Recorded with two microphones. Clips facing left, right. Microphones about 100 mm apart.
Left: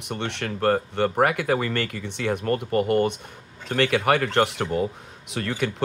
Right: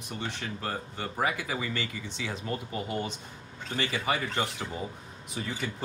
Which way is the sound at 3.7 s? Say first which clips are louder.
Left 10 dB; 70° left (ahead or behind).